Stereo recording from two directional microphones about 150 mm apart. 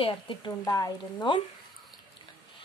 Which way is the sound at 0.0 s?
35° left (ahead or behind).